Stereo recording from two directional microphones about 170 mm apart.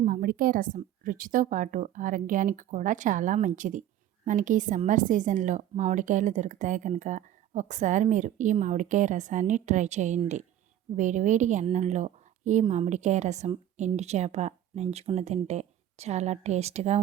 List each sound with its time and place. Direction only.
0.0 s a woman's voice: 55° right (ahead or behind); by 17.0 s 40° right (ahead or behind)